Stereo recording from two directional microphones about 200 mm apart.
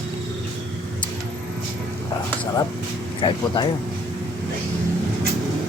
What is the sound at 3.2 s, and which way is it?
Speech, 25° left (ahead or behind).